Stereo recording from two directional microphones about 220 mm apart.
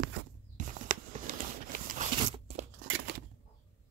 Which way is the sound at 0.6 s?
35° right (ahead or behind).